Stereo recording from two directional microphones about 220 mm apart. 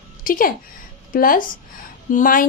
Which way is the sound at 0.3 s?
40° left (ahead or behind).